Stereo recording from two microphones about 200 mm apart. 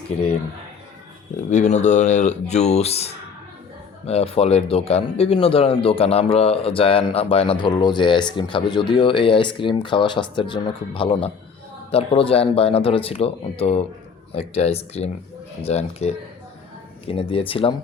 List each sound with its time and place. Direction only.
1.5 s speech: 35° left (ahead or behind)